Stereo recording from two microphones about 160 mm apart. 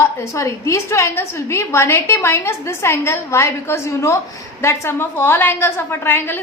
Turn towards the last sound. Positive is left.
turn(degrees=15)  # may be behind; listen again after turning